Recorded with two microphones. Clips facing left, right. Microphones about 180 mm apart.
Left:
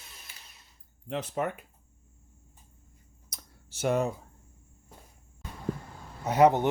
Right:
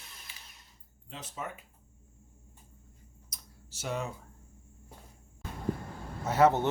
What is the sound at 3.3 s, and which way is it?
Computer keyboard, 55° left (ahead or behind).